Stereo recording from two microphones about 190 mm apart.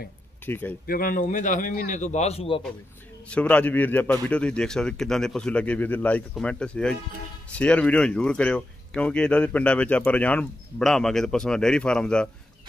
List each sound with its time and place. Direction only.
0.5 s a man's voice: 10° left (ahead or behind)
0.8 s a man's voice: 50° left (ahead or behind); by 2.6 s 30° left (ahead or behind)
3.3 s a man's voice: 5° left (ahead or behind)